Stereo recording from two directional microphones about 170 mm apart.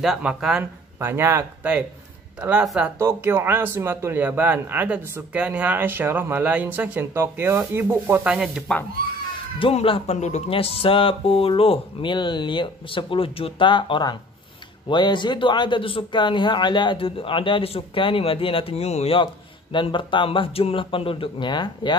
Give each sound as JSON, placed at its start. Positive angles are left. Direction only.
{"t": 0.0, "sound": "speech", "side_deg": -5}
{"t": 3.0, "sound": "speech", "side_deg": -15}
{"t": 9.6, "sound": "a man's voice", "side_deg": 30}